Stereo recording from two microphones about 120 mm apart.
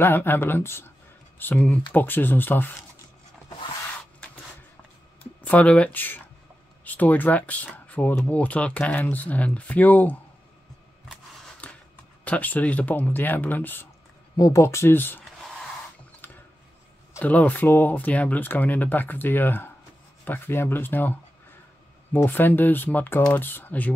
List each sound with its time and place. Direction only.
0.0 s speech: 15° left (ahead or behind)
5.2 s speech: 15° left (ahead or behind)
11.6 s a sound: 10° left (ahead or behind)
12.3 s speech: 15° left (ahead or behind)
14.3 s speech: 30° left (ahead or behind)
16.2 s a sound: 15° left (ahead or behind)
17.1 s speech: 15° left (ahead or behind)